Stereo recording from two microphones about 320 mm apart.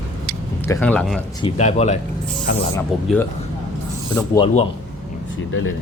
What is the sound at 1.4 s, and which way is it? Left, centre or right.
Speech, centre.